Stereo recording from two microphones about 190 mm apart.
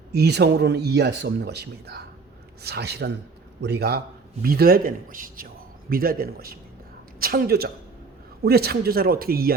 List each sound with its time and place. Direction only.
0.1 s speech: 60° right (ahead or behind)